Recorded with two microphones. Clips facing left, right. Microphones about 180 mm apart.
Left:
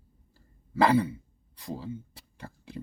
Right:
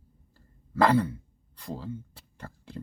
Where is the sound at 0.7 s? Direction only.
10° left (ahead or behind).